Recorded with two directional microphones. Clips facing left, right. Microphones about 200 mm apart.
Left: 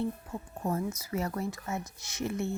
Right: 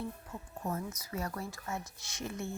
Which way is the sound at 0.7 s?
25° left (ahead or behind).